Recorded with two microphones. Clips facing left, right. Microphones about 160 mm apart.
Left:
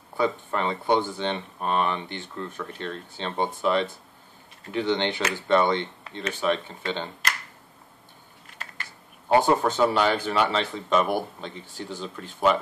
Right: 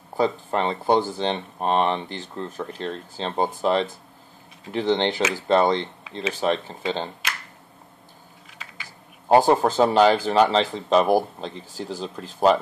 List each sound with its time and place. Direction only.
0.2 s speech: 35° right (ahead or behind)
8.5 s a sound: centre (ahead or behind)
9.3 s speech: 35° right (ahead or behind)